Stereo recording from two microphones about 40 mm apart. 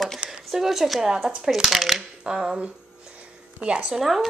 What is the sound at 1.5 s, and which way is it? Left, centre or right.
Speech, centre.